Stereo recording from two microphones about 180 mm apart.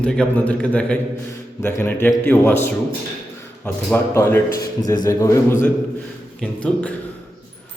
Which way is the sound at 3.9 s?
15° left (ahead or behind).